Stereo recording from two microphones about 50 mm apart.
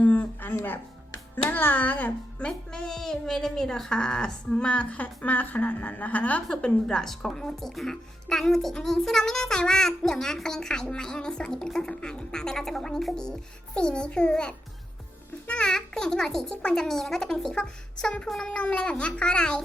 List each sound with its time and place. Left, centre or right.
0.0 s music: left
1.5 s speech: left
2.5 s speech: centre; by 6.4 s left
6.5 s speech: centre
15.4 s music: left
15.7 s a child's voice: centre